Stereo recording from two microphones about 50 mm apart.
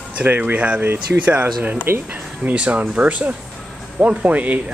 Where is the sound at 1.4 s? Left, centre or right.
Right.